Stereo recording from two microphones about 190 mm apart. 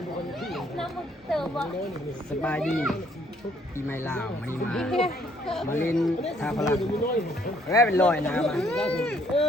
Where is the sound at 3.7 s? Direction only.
10° left (ahead or behind).